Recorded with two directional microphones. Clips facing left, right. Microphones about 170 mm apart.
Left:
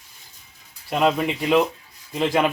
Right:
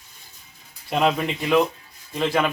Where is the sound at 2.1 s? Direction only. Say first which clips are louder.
Left 2 dB; 15° left (ahead or behind).